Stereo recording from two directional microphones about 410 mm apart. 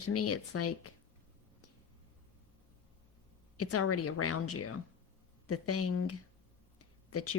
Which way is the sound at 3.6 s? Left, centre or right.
Left.